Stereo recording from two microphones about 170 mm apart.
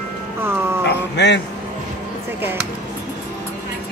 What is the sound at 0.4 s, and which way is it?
Music, 15° right (ahead or behind).